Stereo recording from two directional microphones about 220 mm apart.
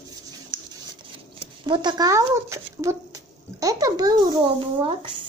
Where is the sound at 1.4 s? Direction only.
20° right (ahead or behind).